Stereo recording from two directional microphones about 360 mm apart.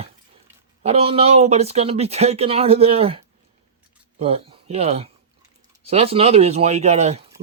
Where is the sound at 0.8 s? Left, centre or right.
Centre.